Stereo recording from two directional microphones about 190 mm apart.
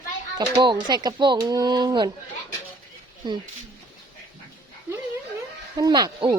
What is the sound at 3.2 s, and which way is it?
Speech, 25° right (ahead or behind).